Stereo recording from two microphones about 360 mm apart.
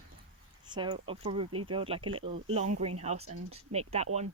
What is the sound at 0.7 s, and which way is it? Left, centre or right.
Speech, centre.